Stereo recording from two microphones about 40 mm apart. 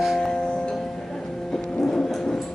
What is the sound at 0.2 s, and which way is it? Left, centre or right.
Music, left.